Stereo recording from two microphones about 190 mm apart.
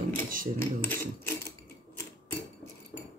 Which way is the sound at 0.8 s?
10° left (ahead or behind).